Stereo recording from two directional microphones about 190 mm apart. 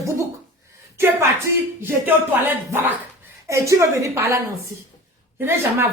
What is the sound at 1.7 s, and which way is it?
Speech, 10° right (ahead or behind).